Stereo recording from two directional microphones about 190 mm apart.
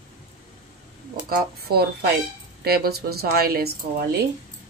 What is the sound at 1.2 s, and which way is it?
Speech, 55° right (ahead or behind).